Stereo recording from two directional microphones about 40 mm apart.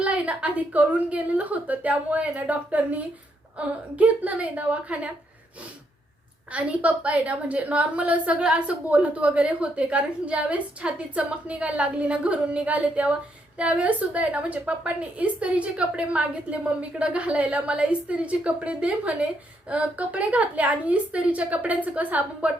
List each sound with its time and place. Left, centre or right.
0.0 s a woman's voice: right
6.5 s a woman's voice: right
8.9 s a woman's voice: right